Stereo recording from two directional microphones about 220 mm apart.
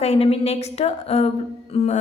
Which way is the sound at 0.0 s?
25° left (ahead or behind).